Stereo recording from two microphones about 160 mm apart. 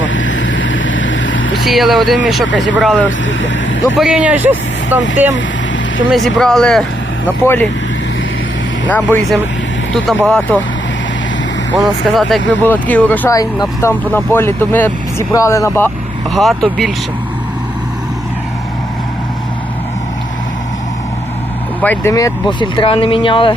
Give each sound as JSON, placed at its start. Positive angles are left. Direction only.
{"t": 1.6, "sound": "speech", "side_deg": 0}
{"t": 6.1, "sound": "speech", "side_deg": 0}
{"t": 8.9, "sound": "speech", "side_deg": 10}
{"t": 12.0, "sound": "speech", "side_deg": 0}
{"t": 13.4, "sound": "speech", "side_deg": 25}
{"t": 14.1, "sound": "speech", "side_deg": 15}
{"t": 16.3, "sound": "speech", "side_deg": 0}
{"t": 21.8, "sound": "speech", "side_deg": 10}
{"t": 22.1, "sound": "speech", "side_deg": 25}